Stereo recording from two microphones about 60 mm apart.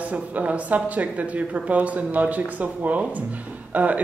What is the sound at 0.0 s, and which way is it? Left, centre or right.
A woman's voice, right.